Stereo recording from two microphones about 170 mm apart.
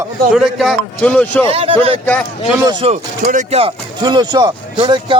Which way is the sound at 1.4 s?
35° right (ahead or behind).